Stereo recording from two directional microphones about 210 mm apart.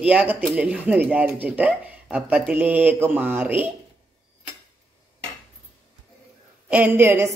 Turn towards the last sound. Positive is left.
turn(degrees=-10)  # may be behind; listen again after turning